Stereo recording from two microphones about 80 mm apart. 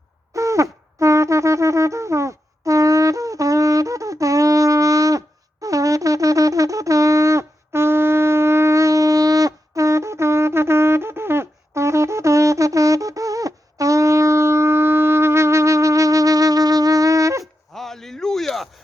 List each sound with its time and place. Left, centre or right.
0.3 s wind instrument: right
17.4 s dog: centre